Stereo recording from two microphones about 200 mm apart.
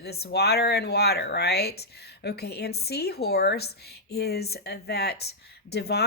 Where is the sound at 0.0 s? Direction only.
55° left (ahead or behind).